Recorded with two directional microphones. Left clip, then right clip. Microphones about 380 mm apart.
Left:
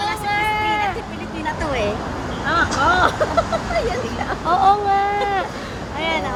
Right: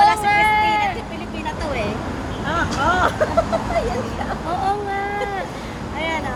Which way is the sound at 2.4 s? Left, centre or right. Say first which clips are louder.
Left 3 dB; centre.